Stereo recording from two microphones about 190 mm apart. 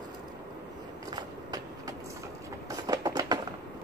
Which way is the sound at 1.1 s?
20° right (ahead or behind).